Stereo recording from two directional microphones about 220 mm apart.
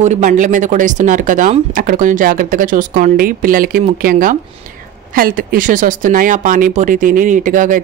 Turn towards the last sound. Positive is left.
turn(degrees=-35)  # may be behind; listen again after turning